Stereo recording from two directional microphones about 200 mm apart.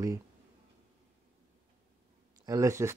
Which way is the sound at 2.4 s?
15° right (ahead or behind).